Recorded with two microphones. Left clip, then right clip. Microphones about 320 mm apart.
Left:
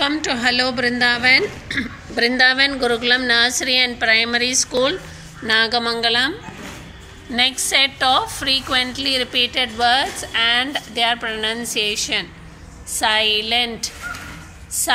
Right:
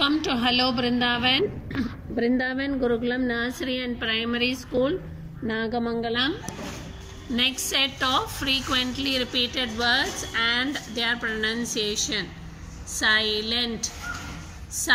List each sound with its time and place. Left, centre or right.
0.0 s a woman's voice: centre
2.1 s speech: left
4.0 s a woman's voice: centre
4.6 s speech: left
7.3 s a woman's voice: centre